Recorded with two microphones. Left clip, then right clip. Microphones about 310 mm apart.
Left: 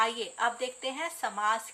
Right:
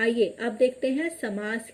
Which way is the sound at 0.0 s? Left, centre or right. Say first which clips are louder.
Right 4 dB; centre.